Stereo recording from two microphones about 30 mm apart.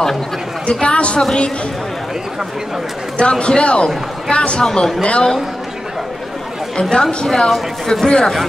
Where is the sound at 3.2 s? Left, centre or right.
Left.